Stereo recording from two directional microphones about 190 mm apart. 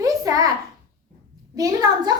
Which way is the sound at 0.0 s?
20° right (ahead or behind).